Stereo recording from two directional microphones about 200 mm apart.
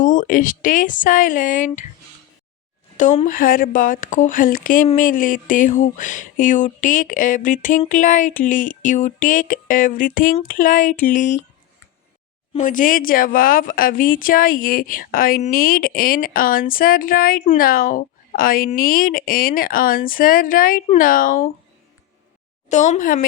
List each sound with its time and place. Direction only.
0.0 s speech: 40° left (ahead or behind)
3.0 s a woman's voice: 40° left (ahead or behind)
12.5 s a woman's voice: 40° left (ahead or behind)
22.7 s speech: 35° left (ahead or behind)